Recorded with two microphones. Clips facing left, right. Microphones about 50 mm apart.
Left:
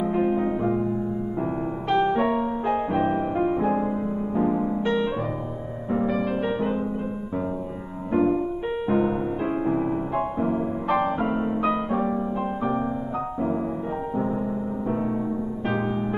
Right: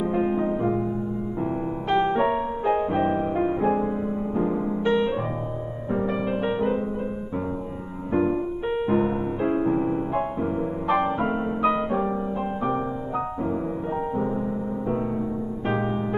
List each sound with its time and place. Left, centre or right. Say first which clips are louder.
0.1 s music: left 1 dB; centre
1.9 s music: even; right
3.1 s music: even; centre
4.8 s piano: right 4 dB; right
6.0 s music: even; centre
8.1 s music: left 1 dB; centre
10.9 s music: even; right
11.1 s music: even; centre